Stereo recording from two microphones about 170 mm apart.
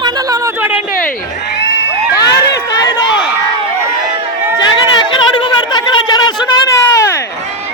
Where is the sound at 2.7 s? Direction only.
25° left (ahead or behind).